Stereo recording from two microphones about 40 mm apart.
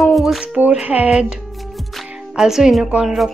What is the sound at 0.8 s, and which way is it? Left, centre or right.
Music, right.